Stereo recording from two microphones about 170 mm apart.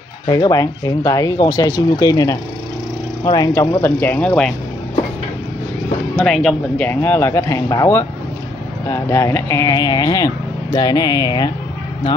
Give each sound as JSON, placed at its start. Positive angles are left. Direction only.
{"t": 0.3, "sound": "speech", "side_deg": 25}
{"t": 3.8, "sound": "speech", "side_deg": 10}
{"t": 6.1, "sound": "speech", "side_deg": 5}